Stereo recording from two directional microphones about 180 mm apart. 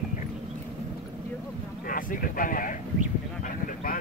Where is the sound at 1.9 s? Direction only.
50° left (ahead or behind).